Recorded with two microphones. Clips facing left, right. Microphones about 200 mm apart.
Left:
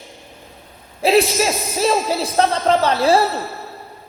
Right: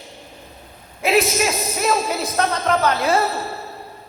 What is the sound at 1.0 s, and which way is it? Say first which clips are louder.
Speech: left 3 dB; 30° left (ahead or behind).